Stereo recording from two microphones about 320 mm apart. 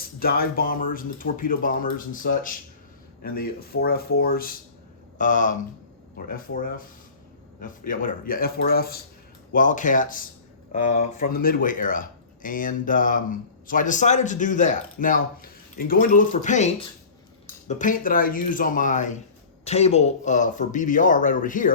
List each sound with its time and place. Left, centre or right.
0.0 s speech: left